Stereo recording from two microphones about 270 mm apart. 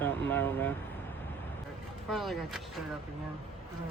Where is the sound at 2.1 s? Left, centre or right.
Centre.